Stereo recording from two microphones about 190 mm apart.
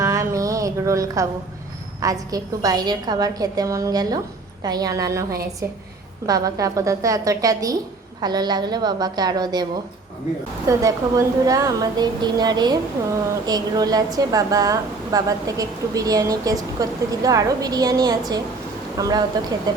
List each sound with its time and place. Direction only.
0.0 s a sound: 15° right (ahead or behind)
2.0 s a woman's voice: 20° right (ahead or behind)
6.2 s a woman's voice: 20° right (ahead or behind)
10.7 s a woman's voice: 15° right (ahead or behind)